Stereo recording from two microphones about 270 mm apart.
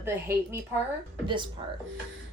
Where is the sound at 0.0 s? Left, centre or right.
Centre.